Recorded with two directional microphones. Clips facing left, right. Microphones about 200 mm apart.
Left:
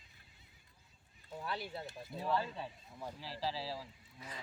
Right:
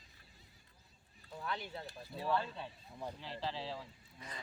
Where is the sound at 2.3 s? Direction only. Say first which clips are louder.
Even; 10° left (ahead or behind).